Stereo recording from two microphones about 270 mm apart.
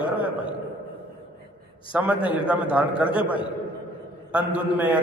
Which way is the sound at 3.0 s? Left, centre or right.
Centre.